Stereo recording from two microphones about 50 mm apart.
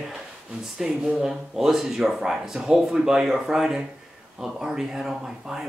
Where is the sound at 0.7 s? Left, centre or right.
Centre.